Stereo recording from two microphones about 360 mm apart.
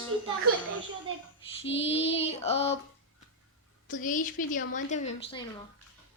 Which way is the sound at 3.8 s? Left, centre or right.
Left.